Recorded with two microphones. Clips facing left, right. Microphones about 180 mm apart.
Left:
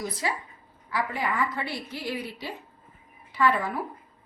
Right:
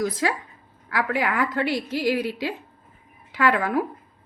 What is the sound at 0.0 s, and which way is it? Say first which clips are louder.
A woman's voice: right 6 dB; 90° right.